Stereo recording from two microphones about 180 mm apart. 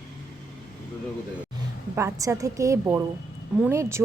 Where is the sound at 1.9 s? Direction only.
15° right (ahead or behind).